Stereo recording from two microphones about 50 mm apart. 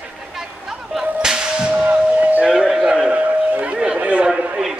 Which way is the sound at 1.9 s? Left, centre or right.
Right.